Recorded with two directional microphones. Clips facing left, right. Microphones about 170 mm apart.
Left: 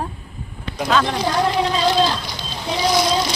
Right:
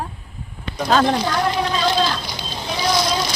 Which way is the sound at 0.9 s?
40° right (ahead or behind).